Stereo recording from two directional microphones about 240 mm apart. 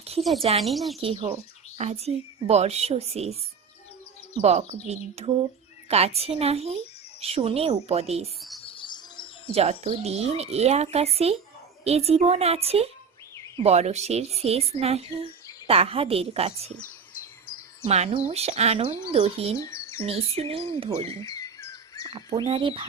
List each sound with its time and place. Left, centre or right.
0.2 s speech: centre
1.0 s a woman's voice: right
4.4 s a woman's voice: right
8.4 s bird: centre
8.6 s bird: centre
9.6 s a woman's voice: right
17.8 s a woman's voice: right
19.5 s bird: centre
20.0 s a woman's voice: right
21.3 s bird: centre
22.1 s a woman's voice: right